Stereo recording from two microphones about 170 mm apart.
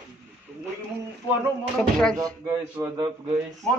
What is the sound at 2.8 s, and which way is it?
Speech, 20° right (ahead or behind).